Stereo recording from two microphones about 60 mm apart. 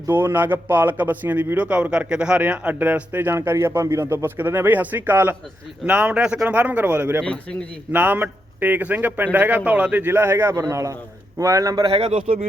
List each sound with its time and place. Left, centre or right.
0.1 s a man's voice: right
3.3 s speech: right
4.0 s speech: right
5.8 s a man's voice: centre
7.2 s a man's voice: centre
7.9 s a man's voice: right
10.0 s speech: right
10.5 s a man's voice: right